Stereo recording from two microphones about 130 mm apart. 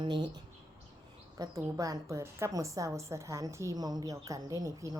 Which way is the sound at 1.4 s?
25° right (ahead or behind).